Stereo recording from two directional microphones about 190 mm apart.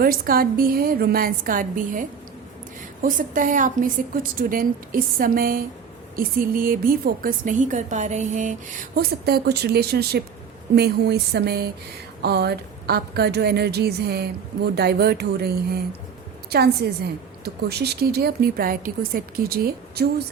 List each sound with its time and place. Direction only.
0.0 s a woman's voice: 50° right (ahead or behind)